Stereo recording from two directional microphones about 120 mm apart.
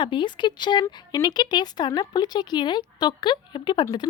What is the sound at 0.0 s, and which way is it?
Speech, 40° left (ahead or behind).